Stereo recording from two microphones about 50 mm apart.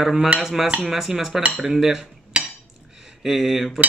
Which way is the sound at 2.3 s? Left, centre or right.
Right.